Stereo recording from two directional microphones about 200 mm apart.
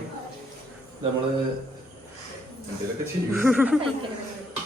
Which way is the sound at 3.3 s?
10° right (ahead or behind).